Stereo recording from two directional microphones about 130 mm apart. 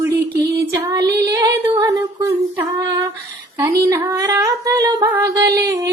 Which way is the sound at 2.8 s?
25° right (ahead or behind).